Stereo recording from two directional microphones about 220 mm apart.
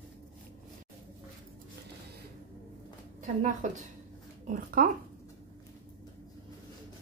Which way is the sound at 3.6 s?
35° right (ahead or behind).